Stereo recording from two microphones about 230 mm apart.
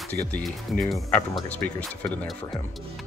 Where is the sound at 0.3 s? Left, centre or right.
Centre.